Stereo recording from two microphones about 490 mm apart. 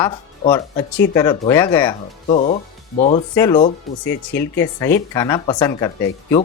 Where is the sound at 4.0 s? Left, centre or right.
Left.